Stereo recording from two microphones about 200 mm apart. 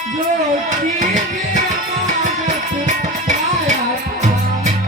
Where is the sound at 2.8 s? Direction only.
35° right (ahead or behind).